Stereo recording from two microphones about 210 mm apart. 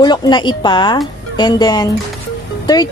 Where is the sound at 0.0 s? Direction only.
20° left (ahead or behind).